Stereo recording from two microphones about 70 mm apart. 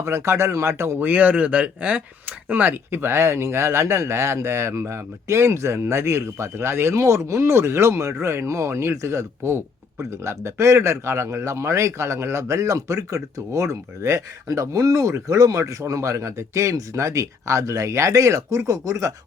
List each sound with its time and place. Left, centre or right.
0.0 s speech: right
0.9 s speech: right